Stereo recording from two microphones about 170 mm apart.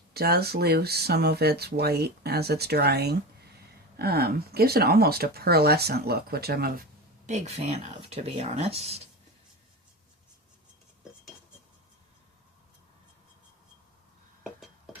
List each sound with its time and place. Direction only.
0.1 s speech: 65° right (ahead or behind)
7.3 s speech: 40° right (ahead or behind)